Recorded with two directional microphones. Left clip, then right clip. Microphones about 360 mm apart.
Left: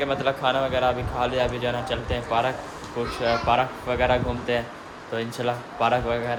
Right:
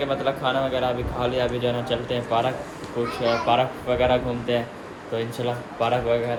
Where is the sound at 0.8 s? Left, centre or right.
Left.